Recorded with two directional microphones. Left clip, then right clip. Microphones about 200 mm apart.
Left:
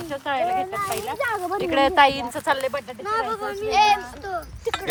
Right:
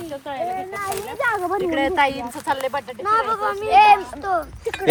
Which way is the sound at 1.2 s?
20° right (ahead or behind).